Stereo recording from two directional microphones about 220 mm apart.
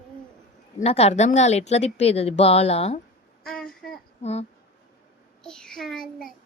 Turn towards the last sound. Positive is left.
turn(degrees=0)  # may be behind; listen again after turning